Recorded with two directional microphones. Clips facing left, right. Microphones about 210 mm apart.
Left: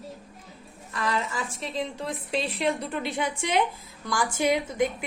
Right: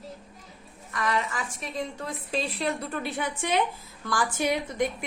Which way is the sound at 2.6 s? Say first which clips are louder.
Left 2 dB; 15° left (ahead or behind).